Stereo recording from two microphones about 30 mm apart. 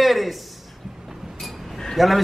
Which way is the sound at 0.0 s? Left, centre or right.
Centre.